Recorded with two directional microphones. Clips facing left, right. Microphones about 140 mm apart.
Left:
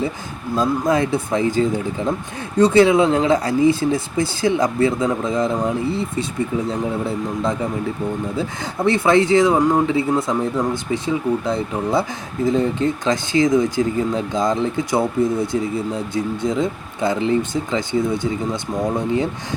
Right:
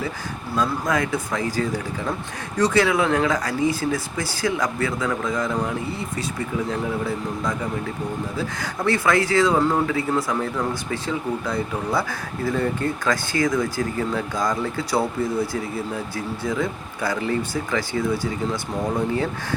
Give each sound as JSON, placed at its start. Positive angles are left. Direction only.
{"t": 0.5, "sound": "speech", "side_deg": 25}